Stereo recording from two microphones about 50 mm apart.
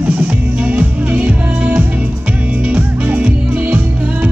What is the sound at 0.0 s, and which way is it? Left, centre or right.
Music, right.